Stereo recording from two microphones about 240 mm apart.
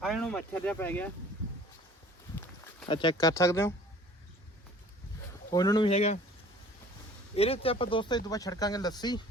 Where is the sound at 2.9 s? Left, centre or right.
Centre.